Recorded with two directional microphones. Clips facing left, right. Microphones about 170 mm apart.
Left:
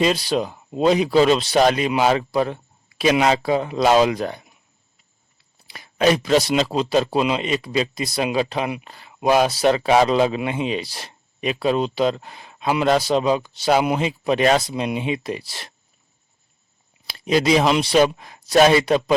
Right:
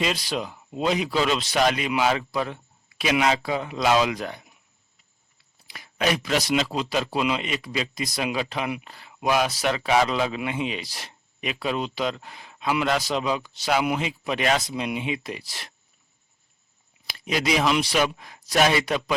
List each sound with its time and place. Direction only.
0.0 s speech: 35° left (ahead or behind)
5.6 s speech: 30° left (ahead or behind)
17.1 s speech: 30° left (ahead or behind)